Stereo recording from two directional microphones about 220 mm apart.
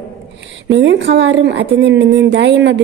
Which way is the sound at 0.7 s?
55° right (ahead or behind).